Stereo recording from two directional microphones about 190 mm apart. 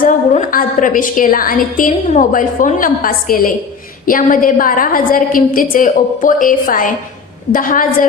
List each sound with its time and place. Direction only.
0.0 s a woman's voice: 45° left (ahead or behind)